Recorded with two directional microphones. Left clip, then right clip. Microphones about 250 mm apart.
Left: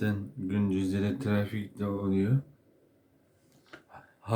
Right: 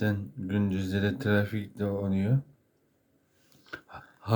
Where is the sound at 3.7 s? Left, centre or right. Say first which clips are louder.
Right 7 dB; centre.